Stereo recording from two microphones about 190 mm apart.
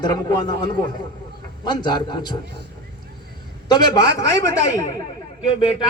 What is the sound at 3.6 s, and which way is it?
A man's voice, 20° left (ahead or behind).